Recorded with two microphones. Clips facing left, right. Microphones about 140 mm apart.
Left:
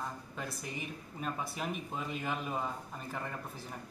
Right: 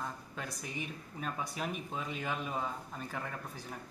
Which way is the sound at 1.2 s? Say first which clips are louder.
Even; centre (ahead or behind).